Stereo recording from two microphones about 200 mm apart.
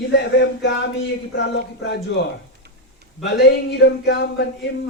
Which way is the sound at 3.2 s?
55° left (ahead or behind).